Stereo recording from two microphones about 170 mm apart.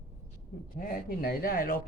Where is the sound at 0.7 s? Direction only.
60° left (ahead or behind).